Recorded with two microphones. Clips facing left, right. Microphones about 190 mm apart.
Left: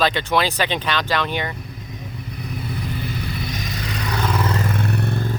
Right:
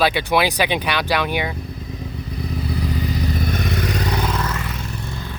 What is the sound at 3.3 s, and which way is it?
Vehicle, 50° right (ahead or behind).